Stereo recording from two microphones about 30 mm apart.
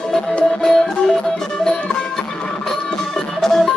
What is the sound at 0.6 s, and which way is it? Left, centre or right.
Music, centre.